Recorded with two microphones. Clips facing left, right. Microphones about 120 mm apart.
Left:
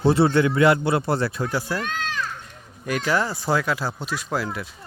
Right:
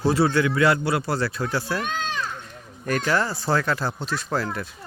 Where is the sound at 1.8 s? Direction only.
20° right (ahead or behind).